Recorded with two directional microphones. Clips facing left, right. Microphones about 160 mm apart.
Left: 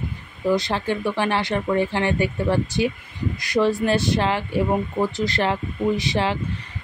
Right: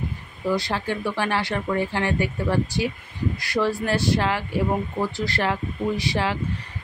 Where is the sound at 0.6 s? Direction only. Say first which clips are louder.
Left 2 dB; 20° left (ahead or behind).